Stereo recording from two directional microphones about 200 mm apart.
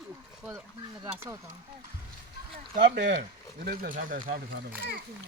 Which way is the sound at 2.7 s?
55° right (ahead or behind).